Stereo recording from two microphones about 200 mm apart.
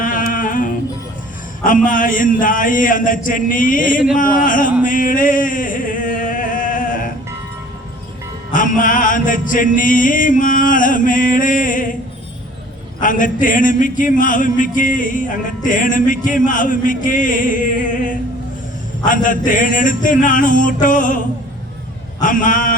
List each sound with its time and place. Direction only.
0.0 s a sound: 45° left (ahead or behind)
1.6 s speech: 40° left (ahead or behind)
4.9 s a sound: 40° left (ahead or behind)
8.5 s speech: 40° left (ahead or behind)
13.0 s speech: 40° left (ahead or behind)
19.0 s speech: 40° left (ahead or behind)
22.3 s speech: 40° left (ahead or behind)